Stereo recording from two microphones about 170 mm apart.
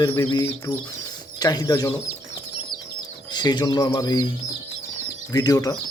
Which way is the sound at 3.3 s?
25° left (ahead or behind).